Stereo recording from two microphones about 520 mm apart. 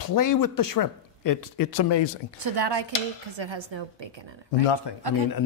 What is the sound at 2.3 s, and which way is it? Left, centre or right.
Speech, right.